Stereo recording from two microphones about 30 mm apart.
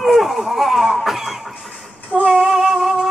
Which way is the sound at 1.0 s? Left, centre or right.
Centre.